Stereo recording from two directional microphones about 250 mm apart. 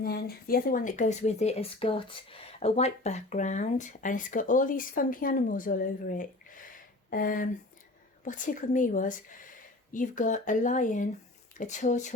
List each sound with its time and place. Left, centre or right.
0.0 s speech: left